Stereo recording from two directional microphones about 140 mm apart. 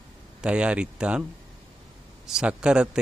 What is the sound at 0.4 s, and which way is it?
Speech, 5° right (ahead or behind).